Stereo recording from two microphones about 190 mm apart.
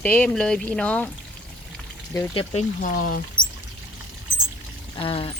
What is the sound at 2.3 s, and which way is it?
Speech, 35° left (ahead or behind).